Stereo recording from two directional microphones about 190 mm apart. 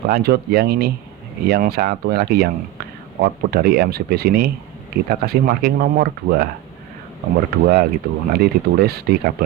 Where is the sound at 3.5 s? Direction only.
55° right (ahead or behind).